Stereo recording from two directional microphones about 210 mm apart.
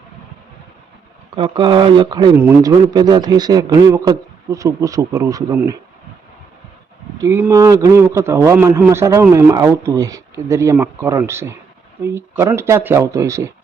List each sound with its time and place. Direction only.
1.4 s speech: 20° right (ahead or behind)
2.3 s a man's voice: 10° right (ahead or behind)
7.2 s a man's voice: 10° right (ahead or behind)